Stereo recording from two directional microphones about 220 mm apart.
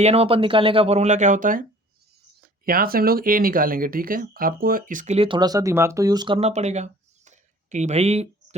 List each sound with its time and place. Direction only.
0.0 s speech: 25° right (ahead or behind)